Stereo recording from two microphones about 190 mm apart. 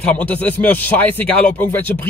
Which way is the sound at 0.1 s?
5° left (ahead or behind).